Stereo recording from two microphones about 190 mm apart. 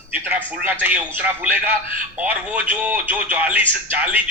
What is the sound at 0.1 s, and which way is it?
A man's voice, 10° right (ahead or behind).